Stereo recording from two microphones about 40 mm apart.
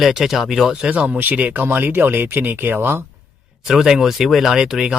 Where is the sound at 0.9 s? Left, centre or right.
Right.